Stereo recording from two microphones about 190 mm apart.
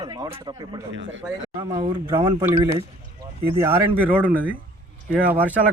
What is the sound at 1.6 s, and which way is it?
Speech, 15° right (ahead or behind).